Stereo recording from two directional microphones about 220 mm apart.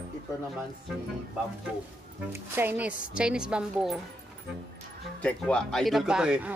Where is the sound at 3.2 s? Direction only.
5° right (ahead or behind).